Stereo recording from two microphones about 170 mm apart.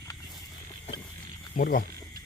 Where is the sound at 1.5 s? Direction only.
55° left (ahead or behind).